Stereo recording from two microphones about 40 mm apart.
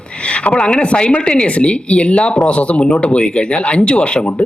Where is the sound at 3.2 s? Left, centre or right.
Left.